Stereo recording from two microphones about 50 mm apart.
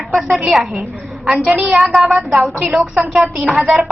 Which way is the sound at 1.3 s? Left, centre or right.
Right.